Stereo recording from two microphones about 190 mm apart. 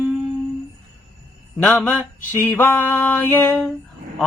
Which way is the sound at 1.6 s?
10° left (ahead or behind).